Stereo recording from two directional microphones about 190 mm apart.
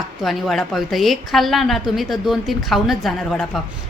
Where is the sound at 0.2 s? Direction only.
Centre (ahead or behind).